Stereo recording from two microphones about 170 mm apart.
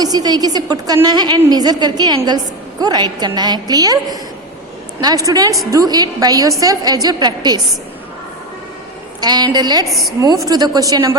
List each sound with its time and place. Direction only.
0.0 s a woman's voice: 25° right (ahead or behind)
9.2 s a woman's voice: 25° right (ahead or behind)
9.9 s a woman's voice: centre (ahead or behind)
10.4 s a woman's voice: 20° right (ahead or behind)